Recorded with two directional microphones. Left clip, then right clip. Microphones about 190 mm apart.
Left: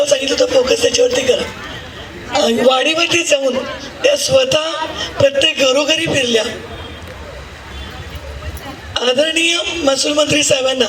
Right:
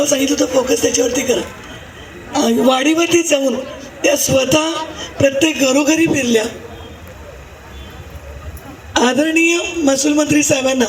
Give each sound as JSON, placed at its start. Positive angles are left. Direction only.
{"t": 0.0, "sound": "speech", "side_deg": -90}
{"t": 2.4, "sound": "a man's voice", "side_deg": -90}
{"t": 8.9, "sound": "a man's voice", "side_deg": -85}